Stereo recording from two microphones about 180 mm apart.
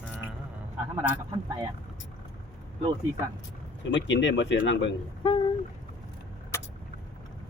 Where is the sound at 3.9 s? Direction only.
90° left.